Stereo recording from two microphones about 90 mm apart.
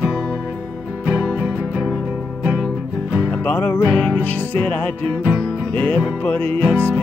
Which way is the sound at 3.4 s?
20° left (ahead or behind).